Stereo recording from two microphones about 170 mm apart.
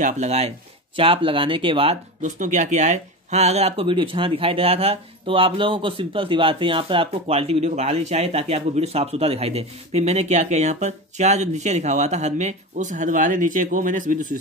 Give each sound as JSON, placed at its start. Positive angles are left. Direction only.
{"t": 0.0, "sound": "speech", "side_deg": -40}
{"t": 2.3, "sound": "speech", "side_deg": -45}